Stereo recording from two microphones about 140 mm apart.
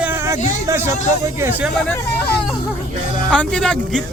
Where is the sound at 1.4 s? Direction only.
15° right (ahead or behind).